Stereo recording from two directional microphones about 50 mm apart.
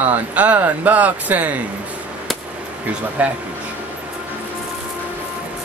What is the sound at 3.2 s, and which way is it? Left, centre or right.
Speech, right.